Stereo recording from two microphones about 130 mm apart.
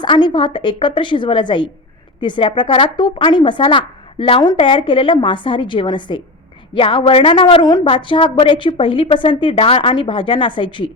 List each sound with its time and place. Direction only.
0.0 s a woman's voice: 35° left (ahead or behind)